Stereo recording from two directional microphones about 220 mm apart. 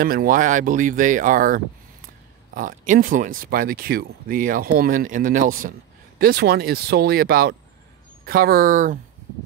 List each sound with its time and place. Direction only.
0.0 s speech: 40° right (ahead or behind)